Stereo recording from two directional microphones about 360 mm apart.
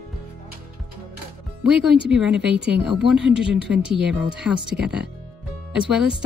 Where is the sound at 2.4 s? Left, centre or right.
Right.